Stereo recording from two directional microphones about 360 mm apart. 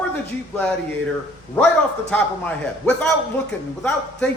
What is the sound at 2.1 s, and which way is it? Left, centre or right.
A man's voice, centre.